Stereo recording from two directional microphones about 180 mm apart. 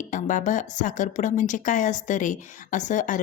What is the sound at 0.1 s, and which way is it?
Speech, 45° left (ahead or behind).